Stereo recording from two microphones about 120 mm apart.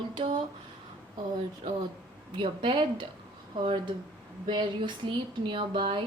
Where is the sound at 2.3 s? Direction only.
45° right (ahead or behind).